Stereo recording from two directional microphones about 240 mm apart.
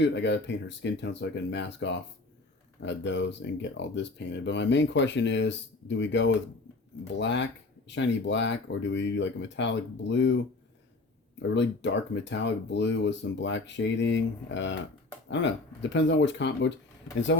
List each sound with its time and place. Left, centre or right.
0.0 s speech: left
11.5 s speech: left